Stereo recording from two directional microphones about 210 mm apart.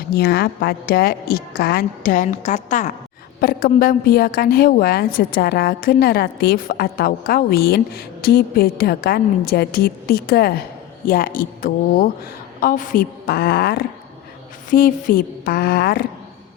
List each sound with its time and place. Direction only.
0.0 s a woman's voice: 50° left (ahead or behind)